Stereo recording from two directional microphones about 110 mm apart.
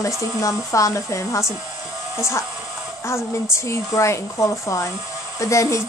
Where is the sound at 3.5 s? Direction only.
25° left (ahead or behind).